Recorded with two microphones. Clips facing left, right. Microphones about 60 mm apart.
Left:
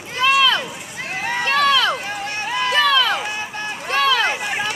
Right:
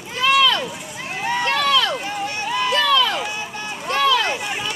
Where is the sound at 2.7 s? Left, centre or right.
Left.